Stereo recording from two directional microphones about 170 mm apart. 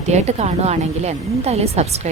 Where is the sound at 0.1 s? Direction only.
40° right (ahead or behind).